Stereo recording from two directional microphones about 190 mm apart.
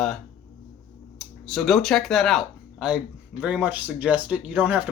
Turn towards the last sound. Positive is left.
turn(degrees=-5)  # may be behind; listen again after turning